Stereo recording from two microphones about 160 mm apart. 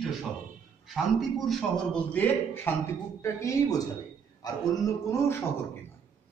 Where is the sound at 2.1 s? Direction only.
10° left (ahead or behind).